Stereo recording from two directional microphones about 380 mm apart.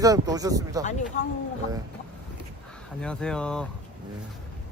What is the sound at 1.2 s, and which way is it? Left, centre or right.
Speech, centre.